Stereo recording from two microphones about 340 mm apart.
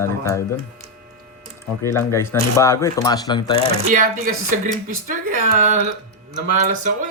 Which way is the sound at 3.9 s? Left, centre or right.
Right.